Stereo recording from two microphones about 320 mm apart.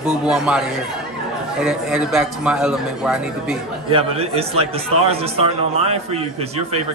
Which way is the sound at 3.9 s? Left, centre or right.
Centre.